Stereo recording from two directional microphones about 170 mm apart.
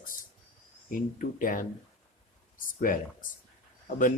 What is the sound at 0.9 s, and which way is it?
Speech, 55° left (ahead or behind).